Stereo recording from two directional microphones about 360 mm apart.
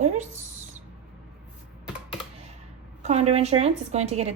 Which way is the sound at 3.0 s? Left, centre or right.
Centre.